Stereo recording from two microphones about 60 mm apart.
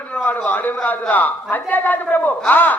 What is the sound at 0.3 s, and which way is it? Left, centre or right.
A man's voice, left.